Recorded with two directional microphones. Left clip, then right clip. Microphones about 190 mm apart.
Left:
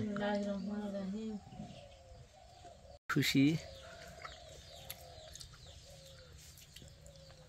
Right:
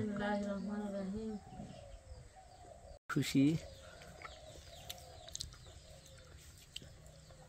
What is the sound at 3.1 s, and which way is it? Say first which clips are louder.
Speech: left 2 dB; 5° right (ahead or behind).